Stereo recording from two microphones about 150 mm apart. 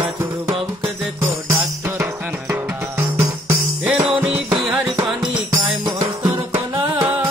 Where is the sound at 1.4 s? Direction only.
15° right (ahead or behind).